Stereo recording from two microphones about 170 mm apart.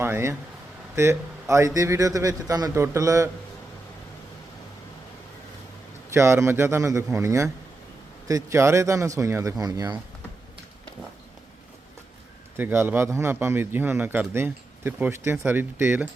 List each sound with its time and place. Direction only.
0.0 s a man's voice: 15° right (ahead or behind)
6.1 s a man's voice: 15° right (ahead or behind)
12.5 s a man's voice: 15° right (ahead or behind)